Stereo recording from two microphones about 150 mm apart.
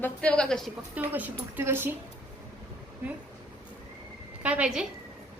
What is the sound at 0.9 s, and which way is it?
A woman's voice, 10° right (ahead or behind).